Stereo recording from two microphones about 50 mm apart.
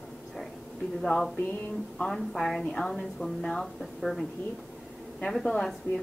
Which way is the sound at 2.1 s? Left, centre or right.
Centre.